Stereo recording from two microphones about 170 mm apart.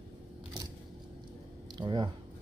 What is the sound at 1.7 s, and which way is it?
Speech, 25° right (ahead or behind).